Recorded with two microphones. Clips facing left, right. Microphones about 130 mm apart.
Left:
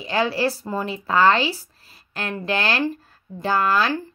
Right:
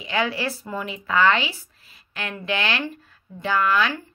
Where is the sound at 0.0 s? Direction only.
35° left (ahead or behind).